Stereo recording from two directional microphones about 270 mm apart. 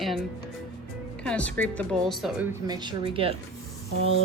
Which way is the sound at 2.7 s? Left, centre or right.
Centre.